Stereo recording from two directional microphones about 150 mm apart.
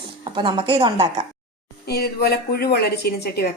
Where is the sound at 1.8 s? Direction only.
90° left.